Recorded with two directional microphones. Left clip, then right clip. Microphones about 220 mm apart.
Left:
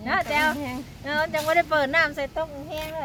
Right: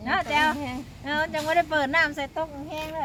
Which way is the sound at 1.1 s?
20° left (ahead or behind).